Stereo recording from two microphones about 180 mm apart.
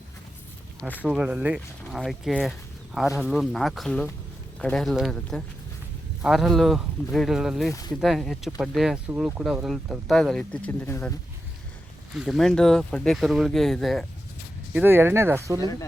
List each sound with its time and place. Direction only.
1.0 s speech: 5° right (ahead or behind)
7.7 s speech: 20° left (ahead or behind)
8.0 s speech: centre (ahead or behind)
12.1 s speech: centre (ahead or behind)
14.7 s speech: 10° right (ahead or behind)
15.6 s speech: 20° left (ahead or behind)